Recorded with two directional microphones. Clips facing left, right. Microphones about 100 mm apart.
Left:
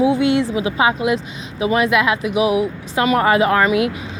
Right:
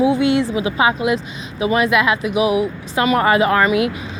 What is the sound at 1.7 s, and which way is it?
A woman's voice, 70° left (ahead or behind).